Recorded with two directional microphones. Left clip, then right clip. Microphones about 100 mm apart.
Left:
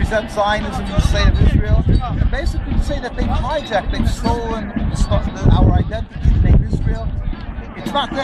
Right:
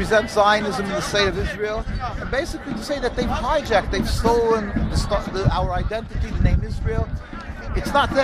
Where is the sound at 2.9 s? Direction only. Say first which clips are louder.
Right 1 dB; 20° right (ahead or behind).